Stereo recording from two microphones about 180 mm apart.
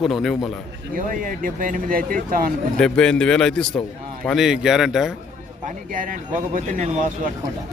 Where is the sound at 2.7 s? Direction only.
5° left (ahead or behind).